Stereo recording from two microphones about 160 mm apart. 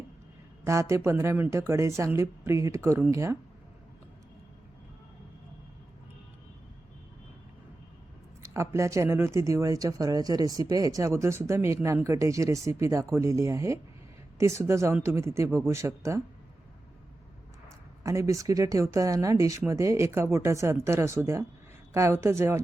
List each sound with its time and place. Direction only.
0.6 s speech: 15° right (ahead or behind)
8.5 s speech: 20° right (ahead or behind)
18.0 s speech: 20° right (ahead or behind)